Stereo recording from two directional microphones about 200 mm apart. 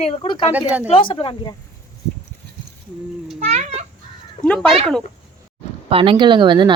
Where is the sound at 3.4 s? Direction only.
35° right (ahead or behind).